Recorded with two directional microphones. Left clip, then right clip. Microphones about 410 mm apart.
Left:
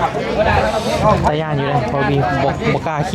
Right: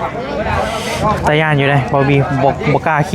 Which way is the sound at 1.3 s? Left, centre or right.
Centre.